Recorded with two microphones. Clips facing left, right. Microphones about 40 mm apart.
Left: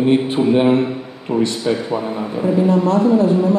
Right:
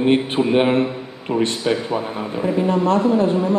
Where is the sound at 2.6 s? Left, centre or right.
Right.